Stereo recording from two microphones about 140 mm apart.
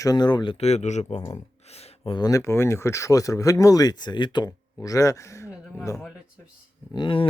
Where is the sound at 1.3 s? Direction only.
45° left (ahead or behind).